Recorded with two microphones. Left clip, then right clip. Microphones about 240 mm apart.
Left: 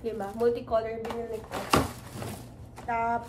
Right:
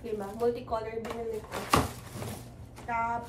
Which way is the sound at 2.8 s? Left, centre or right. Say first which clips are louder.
Left 3 dB; centre.